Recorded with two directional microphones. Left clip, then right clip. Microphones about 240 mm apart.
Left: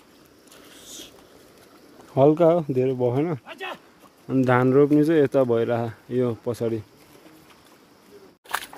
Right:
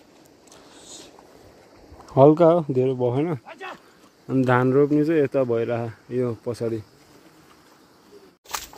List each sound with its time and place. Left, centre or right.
2.1 s speech: centre
3.4 s a sound: left
4.3 s speech: centre